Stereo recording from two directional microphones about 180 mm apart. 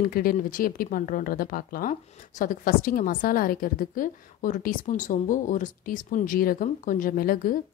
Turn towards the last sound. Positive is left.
turn(degrees=50)  # may be behind; listen again after turning